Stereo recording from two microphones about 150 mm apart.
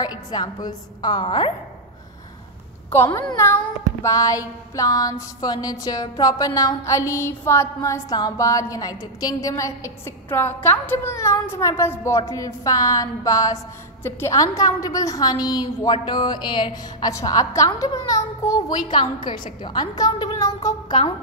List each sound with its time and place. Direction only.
0.0 s a child's voice: 25° left (ahead or behind)
2.9 s a child's voice: 20° left (ahead or behind)